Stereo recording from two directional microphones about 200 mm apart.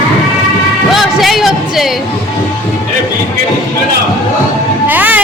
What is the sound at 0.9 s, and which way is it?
Music, centre (ahead or behind).